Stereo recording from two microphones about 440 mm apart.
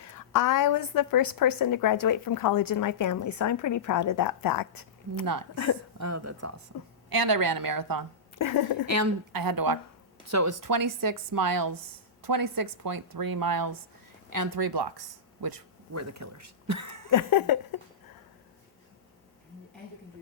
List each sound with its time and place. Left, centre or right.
0.0 s a woman's voice: left
5.2 s speech: right
6.0 s speech: right
7.1 s speech: right
8.4 s a woman's voice: left
8.9 s speech: right
10.2 s speech: right
15.9 s speech: right
17.1 s a woman's voice: left